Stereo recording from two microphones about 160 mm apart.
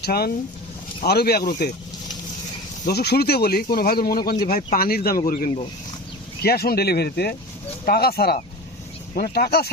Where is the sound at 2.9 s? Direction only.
90° left; by 5.5 s 65° left (ahead or behind).